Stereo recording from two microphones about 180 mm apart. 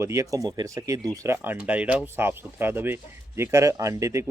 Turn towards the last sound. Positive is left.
turn(degrees=-15)  # may be behind; listen again after turning